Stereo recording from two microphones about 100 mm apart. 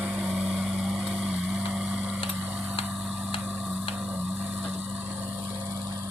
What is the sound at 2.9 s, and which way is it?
Vehicle, 10° right (ahead or behind).